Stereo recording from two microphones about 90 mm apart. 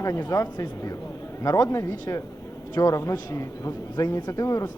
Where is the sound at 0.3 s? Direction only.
45° left (ahead or behind).